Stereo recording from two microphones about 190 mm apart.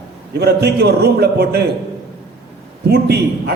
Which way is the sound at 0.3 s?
60° right (ahead or behind).